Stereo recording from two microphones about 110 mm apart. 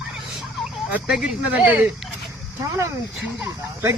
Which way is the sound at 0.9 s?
10° right (ahead or behind).